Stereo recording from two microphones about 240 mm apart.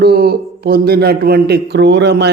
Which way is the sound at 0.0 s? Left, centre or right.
Right.